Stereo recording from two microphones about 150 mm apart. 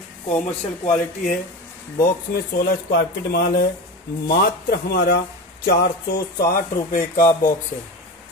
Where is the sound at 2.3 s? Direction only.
90° left.